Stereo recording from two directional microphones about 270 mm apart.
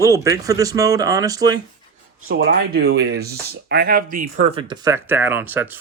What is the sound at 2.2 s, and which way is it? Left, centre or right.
Speech, right.